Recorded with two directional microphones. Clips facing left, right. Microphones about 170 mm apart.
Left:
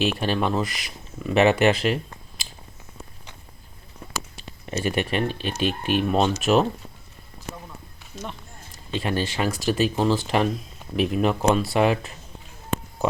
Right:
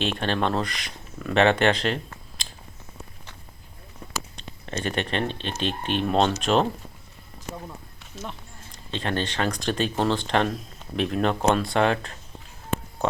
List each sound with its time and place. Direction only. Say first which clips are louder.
0.0 s speech: left 2 dB; 5° left (ahead or behind)
2.4 s a sound: even; 5° left (ahead or behind)
4.4 s speech: left 4 dB; 10° left (ahead or behind)
8.1 s speech: left 1 dB; centre (ahead or behind)